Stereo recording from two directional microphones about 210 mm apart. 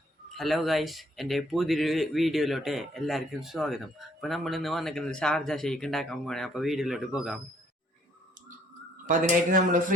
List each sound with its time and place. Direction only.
0.3 s speech: centre (ahead or behind)
9.0 s speech: 40° right (ahead or behind)